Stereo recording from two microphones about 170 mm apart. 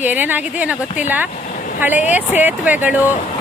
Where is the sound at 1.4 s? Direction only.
50° left (ahead or behind).